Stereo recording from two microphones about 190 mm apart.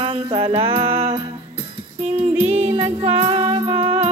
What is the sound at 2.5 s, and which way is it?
Music, 30° right (ahead or behind).